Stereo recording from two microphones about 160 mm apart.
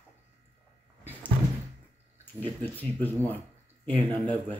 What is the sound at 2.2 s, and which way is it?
Speech, 10° left (ahead or behind).